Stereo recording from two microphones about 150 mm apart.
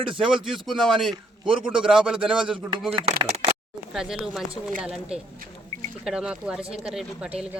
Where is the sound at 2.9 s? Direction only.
40° right (ahead or behind).